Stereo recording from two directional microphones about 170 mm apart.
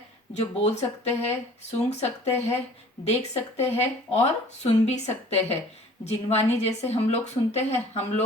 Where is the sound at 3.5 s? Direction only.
40° left (ahead or behind).